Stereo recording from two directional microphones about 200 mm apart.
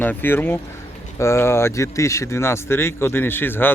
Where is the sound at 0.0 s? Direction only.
10° left (ahead or behind).